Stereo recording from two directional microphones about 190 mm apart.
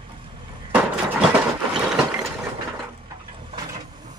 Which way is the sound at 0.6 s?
10° right (ahead or behind).